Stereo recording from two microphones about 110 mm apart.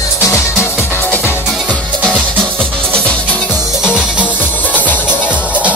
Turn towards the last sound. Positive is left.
turn(degrees=-15)  # may be behind; listen again after turning